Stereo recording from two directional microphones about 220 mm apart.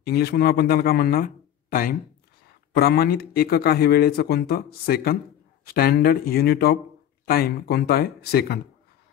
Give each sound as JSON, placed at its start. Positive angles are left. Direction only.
{"t": 0.0, "sound": "speech", "side_deg": 45}